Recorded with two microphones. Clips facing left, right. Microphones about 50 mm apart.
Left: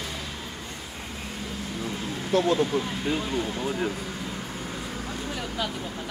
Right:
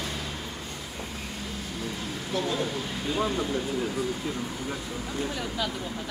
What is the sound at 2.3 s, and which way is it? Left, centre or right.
Speech, left.